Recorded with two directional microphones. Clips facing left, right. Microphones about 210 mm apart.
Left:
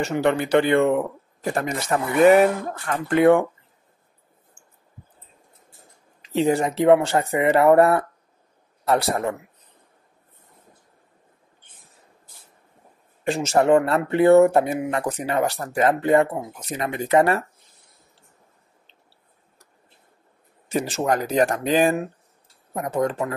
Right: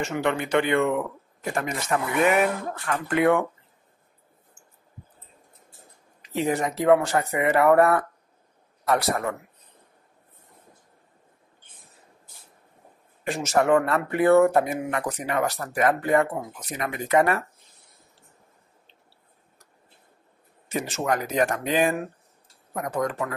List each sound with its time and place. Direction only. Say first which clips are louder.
0.0 s speech: left 4 dB; 35° left (ahead or behind)
6.2 s speech: left 5 dB; 30° left (ahead or behind)
13.2 s speech: left 3 dB; 30° left (ahead or behind)
20.7 s speech: left 4 dB; 35° left (ahead or behind)